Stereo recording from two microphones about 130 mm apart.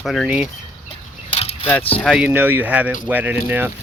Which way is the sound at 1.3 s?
50° left (ahead or behind).